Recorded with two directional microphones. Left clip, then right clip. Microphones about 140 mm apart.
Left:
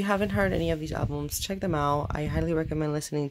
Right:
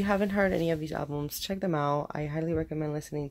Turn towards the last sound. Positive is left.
turn(degrees=25)  # may be behind; listen again after turning